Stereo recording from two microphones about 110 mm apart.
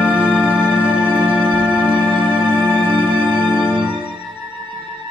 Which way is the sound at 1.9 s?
45° right (ahead or behind).